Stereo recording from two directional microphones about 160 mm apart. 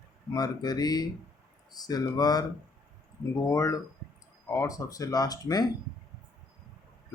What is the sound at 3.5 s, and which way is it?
Speech, 20° left (ahead or behind).